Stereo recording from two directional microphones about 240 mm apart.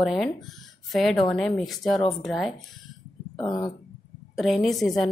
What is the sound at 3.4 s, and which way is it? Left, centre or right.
Speech, centre.